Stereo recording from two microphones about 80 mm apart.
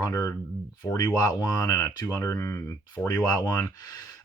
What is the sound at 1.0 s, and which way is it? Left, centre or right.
Speech, left.